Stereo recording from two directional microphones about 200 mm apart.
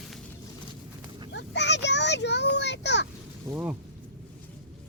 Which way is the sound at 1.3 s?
60° left (ahead or behind).